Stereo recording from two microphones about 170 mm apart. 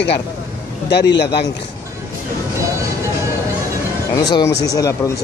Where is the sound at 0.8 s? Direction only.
85° left.